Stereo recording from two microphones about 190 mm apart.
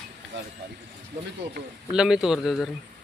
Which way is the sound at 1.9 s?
5° right (ahead or behind).